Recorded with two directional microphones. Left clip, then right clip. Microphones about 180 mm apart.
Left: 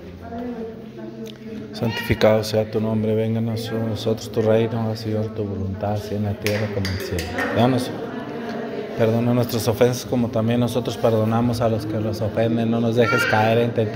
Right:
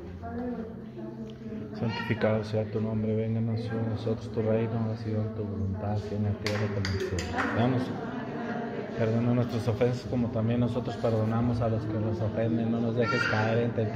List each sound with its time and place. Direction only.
1.8 s a man's voice: 45° left (ahead or behind)
4.0 s a man's voice: 50° left (ahead or behind)
7.5 s a man's voice: 45° left (ahead or behind)
9.0 s a man's voice: 40° left (ahead or behind)